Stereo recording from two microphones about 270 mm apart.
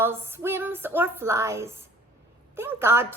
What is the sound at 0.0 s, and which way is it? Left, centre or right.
A woman's voice, centre.